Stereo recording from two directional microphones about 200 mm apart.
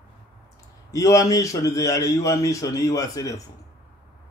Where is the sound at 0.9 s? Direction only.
15° left (ahead or behind).